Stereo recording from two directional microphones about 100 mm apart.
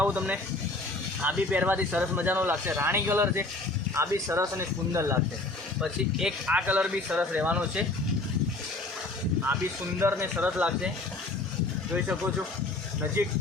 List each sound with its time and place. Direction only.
0.0 s speech: 15° right (ahead or behind)
5.8 s speech: 5° right (ahead or behind)
10.0 s speech: 25° right (ahead or behind)